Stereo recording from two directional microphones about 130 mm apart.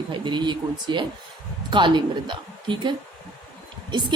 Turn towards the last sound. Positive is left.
turn(degrees=-35)  # may be behind; listen again after turning